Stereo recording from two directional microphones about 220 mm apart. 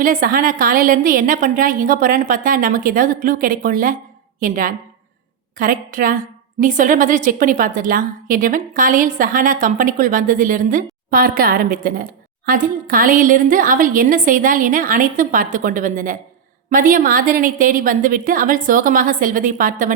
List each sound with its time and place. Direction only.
0.0 s a woman's voice: 40° right (ahead or behind)